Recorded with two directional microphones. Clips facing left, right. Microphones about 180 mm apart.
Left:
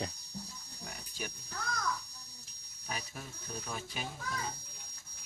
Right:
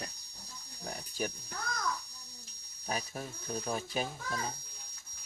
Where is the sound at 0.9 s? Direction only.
40° right (ahead or behind).